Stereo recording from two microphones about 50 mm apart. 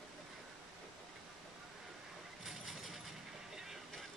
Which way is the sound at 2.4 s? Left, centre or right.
Centre.